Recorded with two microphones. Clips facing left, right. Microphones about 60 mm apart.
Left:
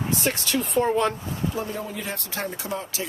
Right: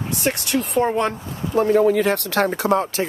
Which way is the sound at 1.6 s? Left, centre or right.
Right.